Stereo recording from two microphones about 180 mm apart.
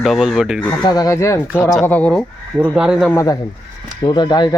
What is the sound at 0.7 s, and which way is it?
Speech, 20° left (ahead or behind).